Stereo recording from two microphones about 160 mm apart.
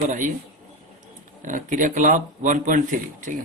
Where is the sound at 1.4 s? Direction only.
55° right (ahead or behind).